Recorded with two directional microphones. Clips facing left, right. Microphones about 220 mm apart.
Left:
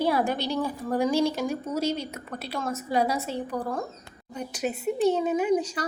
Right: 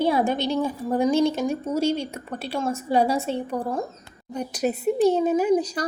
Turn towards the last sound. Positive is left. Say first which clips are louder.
# right 3 dB
turn(degrees=-35)  # may be behind; listen again after turning